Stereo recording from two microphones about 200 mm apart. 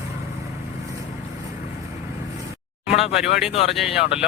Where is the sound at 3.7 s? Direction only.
Centre (ahead or behind).